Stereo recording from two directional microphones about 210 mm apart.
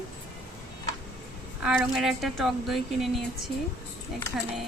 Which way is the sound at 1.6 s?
Centre (ahead or behind).